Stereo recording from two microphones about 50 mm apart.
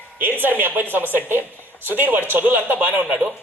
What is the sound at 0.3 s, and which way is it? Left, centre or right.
A man's voice, right.